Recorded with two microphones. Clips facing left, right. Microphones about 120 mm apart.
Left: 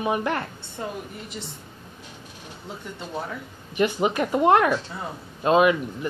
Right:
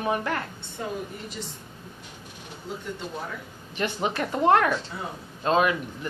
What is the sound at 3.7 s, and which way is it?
A woman's voice, 15° left (ahead or behind).